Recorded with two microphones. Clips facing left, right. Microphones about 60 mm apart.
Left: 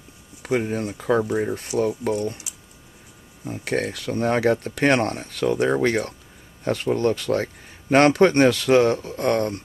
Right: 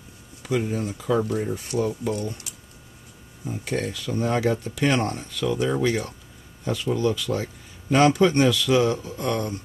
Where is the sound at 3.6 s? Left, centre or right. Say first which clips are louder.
Left 3 dB; left.